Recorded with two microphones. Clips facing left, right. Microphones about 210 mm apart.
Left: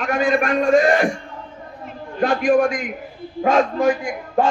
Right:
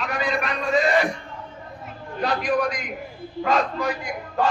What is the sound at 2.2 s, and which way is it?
A man's voice, 50° left (ahead or behind).